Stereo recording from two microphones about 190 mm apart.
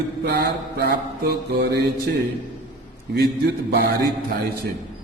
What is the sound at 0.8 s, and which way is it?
Mantra, 60° right (ahead or behind).